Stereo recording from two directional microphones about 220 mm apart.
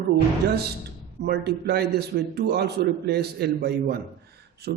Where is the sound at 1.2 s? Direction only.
45° right (ahead or behind).